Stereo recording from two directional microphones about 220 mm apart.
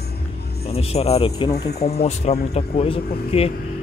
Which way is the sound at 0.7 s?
25° left (ahead or behind).